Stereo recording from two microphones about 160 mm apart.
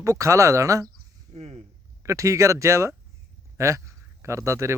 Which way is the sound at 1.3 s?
40° right (ahead or behind).